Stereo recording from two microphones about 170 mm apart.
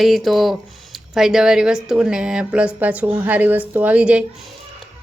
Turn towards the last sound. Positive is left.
turn(degrees=-5)  # may be behind; listen again after turning